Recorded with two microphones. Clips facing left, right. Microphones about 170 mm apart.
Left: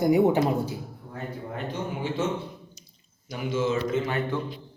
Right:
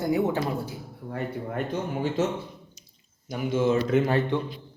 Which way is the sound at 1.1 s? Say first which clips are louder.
Right 5 dB; 70° right (ahead or behind).